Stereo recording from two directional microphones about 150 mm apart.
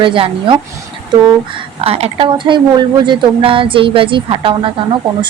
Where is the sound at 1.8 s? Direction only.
45° right (ahead or behind).